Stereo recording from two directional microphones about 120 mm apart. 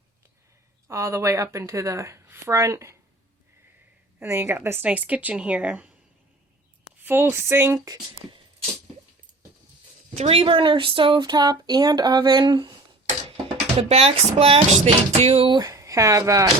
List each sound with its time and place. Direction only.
0.9 s speech: 25° right (ahead or behind)
4.2 s speech: 20° right (ahead or behind)
7.0 s speech: 20° right (ahead or behind)
10.2 s speech: 55° right (ahead or behind)
13.3 s speech: 55° right (ahead or behind)
15.5 s speech: 30° right (ahead or behind)